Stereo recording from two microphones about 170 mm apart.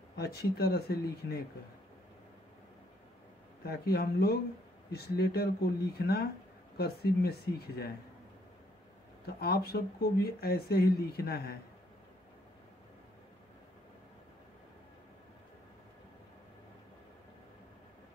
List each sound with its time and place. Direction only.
0.2 s speech: 70° left (ahead or behind)
3.6 s speech: 65° left (ahead or behind)
9.2 s speech: 65° left (ahead or behind)